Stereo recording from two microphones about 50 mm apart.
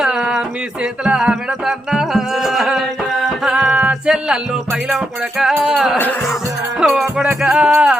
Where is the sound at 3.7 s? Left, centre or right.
Right.